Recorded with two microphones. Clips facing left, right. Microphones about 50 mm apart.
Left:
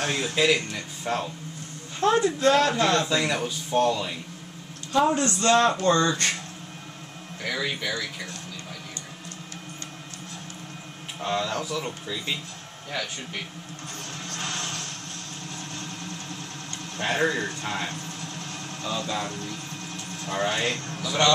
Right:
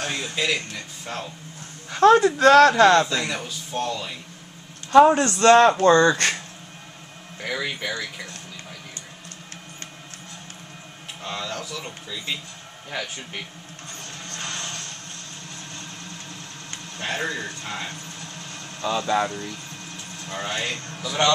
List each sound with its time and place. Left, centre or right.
0.0 s speech: centre
1.9 s a woman's voice: right
3.1 s speech: centre
4.9 s a man's voice: right
7.4 s speech: centre
11.1 s speech: centre
12.9 s speech: centre
13.9 s music: centre
15.7 s vehicle: centre
16.9 s speech: centre
18.8 s speech: right
19.2 s speech: centre